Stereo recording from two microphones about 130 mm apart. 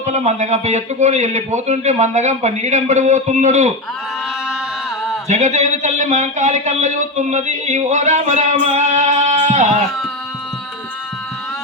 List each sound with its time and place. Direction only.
0.0 s a man's voice: 60° right (ahead or behind)
5.3 s a man's voice: 65° right (ahead or behind)